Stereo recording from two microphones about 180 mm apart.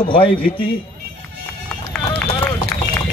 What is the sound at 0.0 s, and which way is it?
Speech, 30° left (ahead or behind).